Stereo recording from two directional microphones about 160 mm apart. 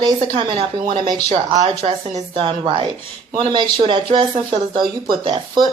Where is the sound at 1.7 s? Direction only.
35° right (ahead or behind).